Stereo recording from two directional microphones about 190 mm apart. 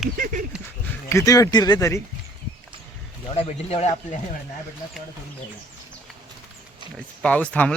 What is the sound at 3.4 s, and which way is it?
Speech, 35° left (ahead or behind).